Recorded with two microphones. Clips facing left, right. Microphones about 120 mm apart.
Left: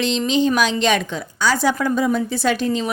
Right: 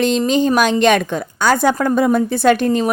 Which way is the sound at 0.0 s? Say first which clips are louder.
Right 3 dB; 50° right (ahead or behind).